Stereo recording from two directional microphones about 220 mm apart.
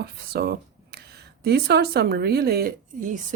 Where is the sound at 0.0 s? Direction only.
45° right (ahead or behind).